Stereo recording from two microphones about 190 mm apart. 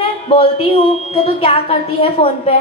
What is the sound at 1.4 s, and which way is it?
A woman's voice, 30° left (ahead or behind).